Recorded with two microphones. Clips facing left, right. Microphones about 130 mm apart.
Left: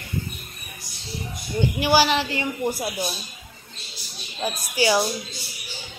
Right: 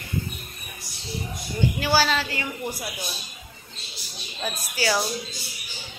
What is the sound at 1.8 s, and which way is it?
Speech, 15° left (ahead or behind).